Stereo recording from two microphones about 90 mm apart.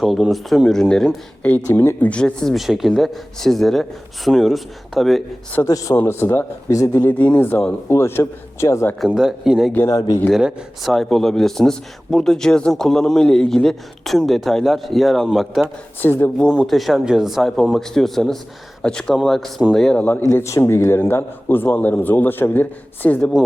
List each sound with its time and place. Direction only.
0.0 s speech: centre (ahead or behind)
1.7 s a man's voice: 25° left (ahead or behind)
2.0 s speech: 10° left (ahead or behind)
5.6 s speech: 40° left (ahead or behind)
6.0 s a man's voice: 25° left (ahead or behind)
9.0 s speech: 5° right (ahead or behind)
16.0 s a man's voice: 25° left (ahead or behind)
16.6 s speech: centre (ahead or behind)
20.0 s a man's voice: 20° left (ahead or behind)
20.2 s a man's voice: 35° left (ahead or behind)